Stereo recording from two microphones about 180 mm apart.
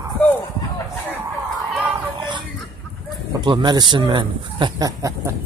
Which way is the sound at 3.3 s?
25° right (ahead or behind).